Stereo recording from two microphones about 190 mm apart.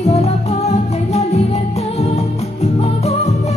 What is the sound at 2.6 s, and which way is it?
Music, 35° left (ahead or behind).